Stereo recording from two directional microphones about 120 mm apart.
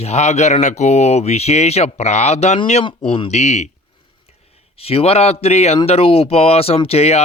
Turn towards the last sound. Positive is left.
turn(degrees=60)  # may be behind; listen again after turning